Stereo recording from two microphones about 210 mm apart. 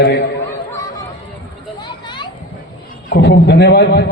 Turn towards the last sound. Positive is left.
turn(degrees=50)  # may be behind; listen again after turning